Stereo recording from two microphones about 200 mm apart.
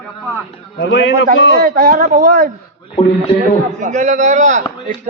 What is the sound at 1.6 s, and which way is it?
Speech, 45° right (ahead or behind).